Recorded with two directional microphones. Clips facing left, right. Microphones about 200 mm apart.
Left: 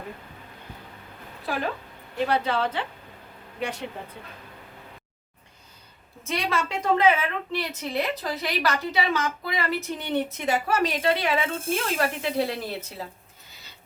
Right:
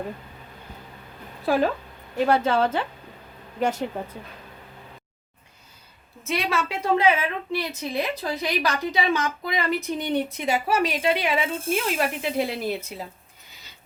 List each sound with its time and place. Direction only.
2.2 s a woman's voice: 45° right (ahead or behind)
6.2 s a woman's voice: 5° right (ahead or behind)